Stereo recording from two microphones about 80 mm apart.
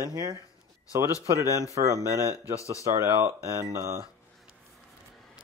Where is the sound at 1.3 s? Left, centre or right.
Right.